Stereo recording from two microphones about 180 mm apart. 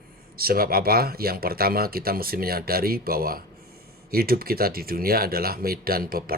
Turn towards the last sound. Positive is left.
turn(degrees=-55)  # may be behind; listen again after turning